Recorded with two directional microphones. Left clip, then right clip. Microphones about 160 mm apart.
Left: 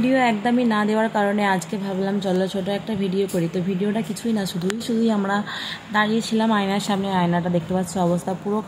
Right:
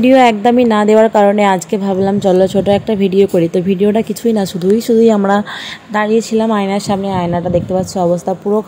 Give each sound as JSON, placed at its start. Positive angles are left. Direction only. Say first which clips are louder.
{"t": 0.0, "sound": "a woman's voice", "louder": "right 11 dB", "side_deg": -50}